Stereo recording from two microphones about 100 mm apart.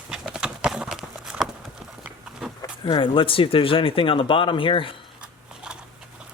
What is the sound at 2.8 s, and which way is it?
Speech, 60° left (ahead or behind).